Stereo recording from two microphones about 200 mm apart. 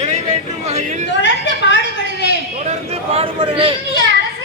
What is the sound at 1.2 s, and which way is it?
Speech, 60° left (ahead or behind).